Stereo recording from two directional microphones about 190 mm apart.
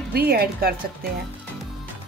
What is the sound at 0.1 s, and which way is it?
Speech, 55° right (ahead or behind).